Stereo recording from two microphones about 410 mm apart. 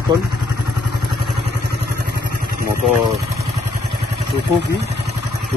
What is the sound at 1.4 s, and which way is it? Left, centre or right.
Vehicle, right.